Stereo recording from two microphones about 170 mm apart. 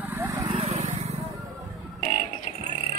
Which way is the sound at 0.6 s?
40° right (ahead or behind).